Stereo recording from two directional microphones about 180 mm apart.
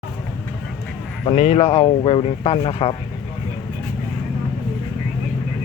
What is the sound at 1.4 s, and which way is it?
Speech, 35° left (ahead or behind).